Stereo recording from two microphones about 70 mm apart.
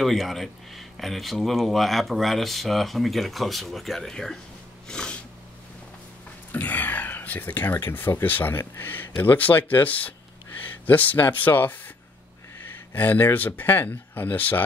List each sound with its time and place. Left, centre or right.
0.0 s speech: centre
4.8 s snort: centre
6.5 s a sound: left
8.2 s speech: left
12.9 s speech: left